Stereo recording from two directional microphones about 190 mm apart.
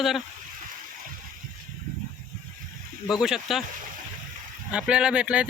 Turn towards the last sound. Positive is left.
turn(degrees=-5)  # may be behind; listen again after turning